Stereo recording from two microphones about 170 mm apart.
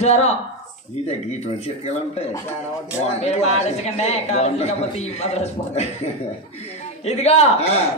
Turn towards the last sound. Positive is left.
turn(degrees=40)  # may be behind; listen again after turning